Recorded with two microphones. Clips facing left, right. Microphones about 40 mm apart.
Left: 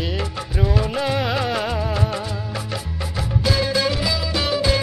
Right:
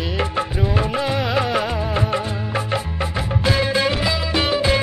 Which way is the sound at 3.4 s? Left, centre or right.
Right.